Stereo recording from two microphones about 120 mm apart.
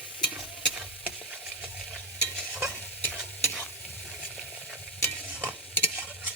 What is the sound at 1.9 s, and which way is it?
Stir, 5° left (ahead or behind).